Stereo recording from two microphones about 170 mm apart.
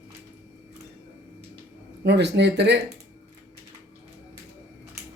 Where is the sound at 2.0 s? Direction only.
80° right.